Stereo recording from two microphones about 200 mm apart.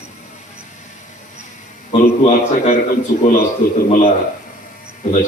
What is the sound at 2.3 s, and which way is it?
Speech, 35° left (ahead or behind).